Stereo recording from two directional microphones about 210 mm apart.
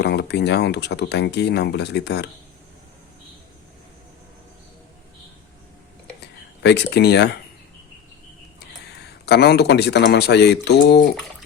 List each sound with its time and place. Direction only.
0.0 s speech: 50° left (ahead or behind)
6.6 s speech: 55° left (ahead or behind)
9.2 s speech: 50° left (ahead or behind)